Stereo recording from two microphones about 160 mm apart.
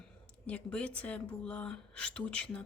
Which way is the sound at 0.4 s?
10° left (ahead or behind).